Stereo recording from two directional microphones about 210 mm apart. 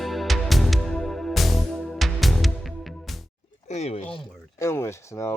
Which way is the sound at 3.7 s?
30° left (ahead or behind).